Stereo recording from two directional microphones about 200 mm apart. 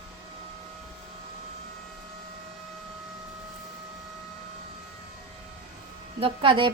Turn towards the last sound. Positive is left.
turn(degrees=-25)  # may be behind; listen again after turning